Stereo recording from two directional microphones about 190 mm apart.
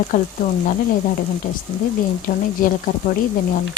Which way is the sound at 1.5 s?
45° left (ahead or behind).